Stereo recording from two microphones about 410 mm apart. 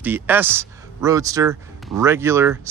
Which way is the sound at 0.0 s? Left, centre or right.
Centre.